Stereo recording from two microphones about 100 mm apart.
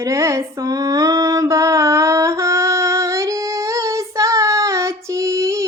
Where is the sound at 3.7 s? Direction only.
30° right (ahead or behind).